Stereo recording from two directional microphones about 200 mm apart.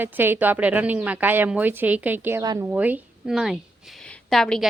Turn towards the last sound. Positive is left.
turn(degrees=0)  # may be behind; listen again after turning